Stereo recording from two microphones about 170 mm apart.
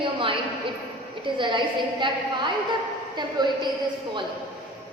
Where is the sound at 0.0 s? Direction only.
30° right (ahead or behind).